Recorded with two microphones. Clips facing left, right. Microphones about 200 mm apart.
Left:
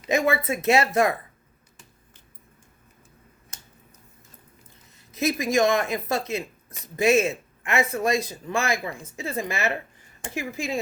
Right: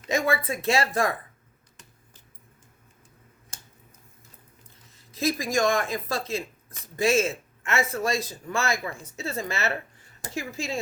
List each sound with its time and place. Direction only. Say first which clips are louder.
0.1 s speech: left 3 dB; 20° left (ahead or behind)
5.1 s speech: left 3 dB; 20° left (ahead or behind)